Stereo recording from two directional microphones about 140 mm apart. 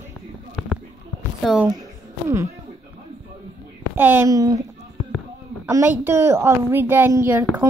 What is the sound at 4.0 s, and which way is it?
Speech, 15° right (ahead or behind).